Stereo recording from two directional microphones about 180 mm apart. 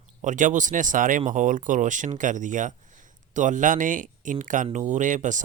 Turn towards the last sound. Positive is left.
turn(degrees=-45)  # may be behind; listen again after turning